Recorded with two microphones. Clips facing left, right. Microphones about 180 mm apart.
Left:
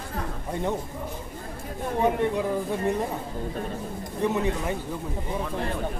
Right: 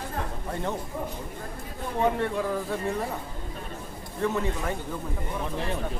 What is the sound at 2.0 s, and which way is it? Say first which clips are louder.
Speech: left 2 dB; 15° left (ahead or behind).